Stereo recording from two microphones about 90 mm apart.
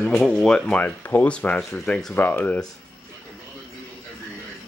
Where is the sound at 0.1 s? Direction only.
Centre (ahead or behind).